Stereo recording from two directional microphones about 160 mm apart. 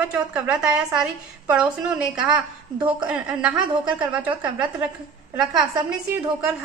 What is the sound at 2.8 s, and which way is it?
Speech, 30° right (ahead or behind).